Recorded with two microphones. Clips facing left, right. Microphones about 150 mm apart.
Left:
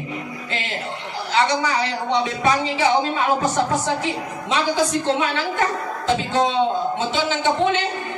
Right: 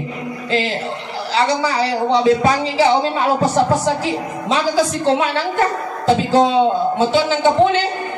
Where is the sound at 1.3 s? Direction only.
35° right (ahead or behind).